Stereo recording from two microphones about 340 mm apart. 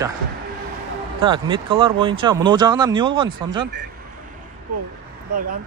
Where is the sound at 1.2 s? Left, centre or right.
Centre.